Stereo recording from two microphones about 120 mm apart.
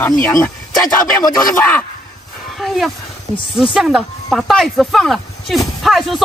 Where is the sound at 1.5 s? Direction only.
15° left (ahead or behind).